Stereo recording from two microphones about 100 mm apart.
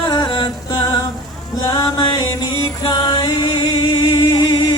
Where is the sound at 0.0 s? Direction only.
40° left (ahead or behind).